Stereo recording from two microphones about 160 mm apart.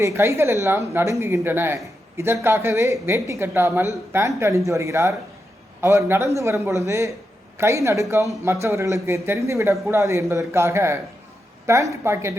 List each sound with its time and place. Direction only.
0.0 s a man's voice: 15° right (ahead or behind)